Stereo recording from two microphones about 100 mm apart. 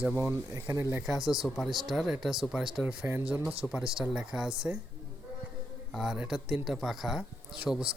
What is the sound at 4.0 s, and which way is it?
Speech, 5° right (ahead or behind).